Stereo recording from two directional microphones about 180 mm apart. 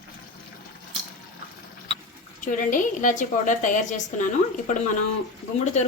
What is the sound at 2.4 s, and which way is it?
A woman's voice, 45° left (ahead or behind).